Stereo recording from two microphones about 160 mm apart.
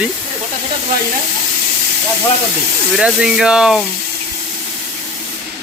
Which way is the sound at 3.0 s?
5° right (ahead or behind).